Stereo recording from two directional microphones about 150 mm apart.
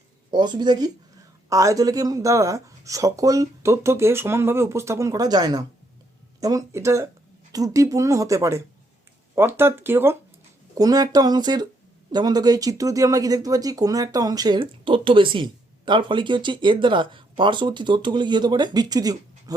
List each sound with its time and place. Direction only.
0.3 s speech: 30° right (ahead or behind)